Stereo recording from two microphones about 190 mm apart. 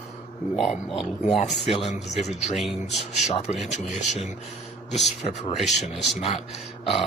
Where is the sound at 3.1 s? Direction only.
35° left (ahead or behind).